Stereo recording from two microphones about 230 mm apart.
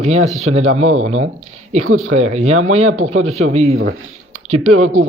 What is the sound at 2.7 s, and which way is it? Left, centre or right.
Speech, right.